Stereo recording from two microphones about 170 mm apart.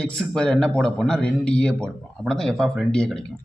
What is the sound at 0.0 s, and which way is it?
A man's voice, 5° left (ahead or behind).